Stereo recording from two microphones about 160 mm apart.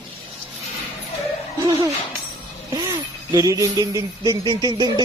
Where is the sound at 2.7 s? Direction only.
25° right (ahead or behind).